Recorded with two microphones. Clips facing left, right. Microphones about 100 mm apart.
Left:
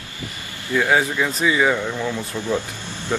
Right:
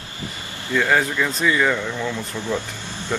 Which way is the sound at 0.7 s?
10° left (ahead or behind).